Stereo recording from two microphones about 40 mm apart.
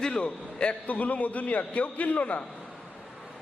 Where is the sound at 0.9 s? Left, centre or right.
Left.